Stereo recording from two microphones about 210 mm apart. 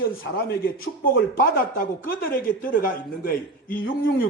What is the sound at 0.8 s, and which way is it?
Speech, 45° left (ahead or behind).